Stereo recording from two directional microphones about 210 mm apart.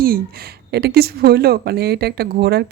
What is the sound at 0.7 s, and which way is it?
Speech, 50° right (ahead or behind).